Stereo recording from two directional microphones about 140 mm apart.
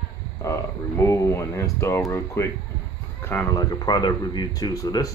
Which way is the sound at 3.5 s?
25° left (ahead or behind).